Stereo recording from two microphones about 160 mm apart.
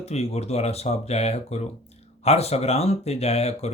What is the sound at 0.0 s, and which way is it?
Speech, 40° left (ahead or behind).